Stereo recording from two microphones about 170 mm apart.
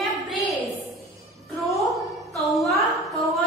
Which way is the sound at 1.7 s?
Centre (ahead or behind).